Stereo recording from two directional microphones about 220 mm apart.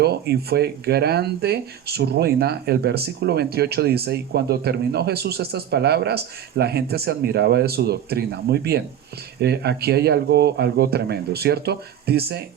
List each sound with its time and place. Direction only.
0.0 s speech: 50° right (ahead or behind)